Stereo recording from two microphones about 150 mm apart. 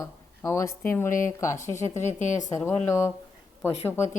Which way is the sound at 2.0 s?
55° left (ahead or behind).